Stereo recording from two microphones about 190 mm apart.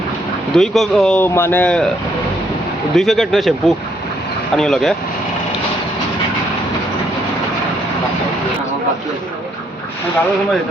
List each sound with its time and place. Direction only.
0.5 s speech: centre (ahead or behind)
2.9 s speech: centre (ahead or behind)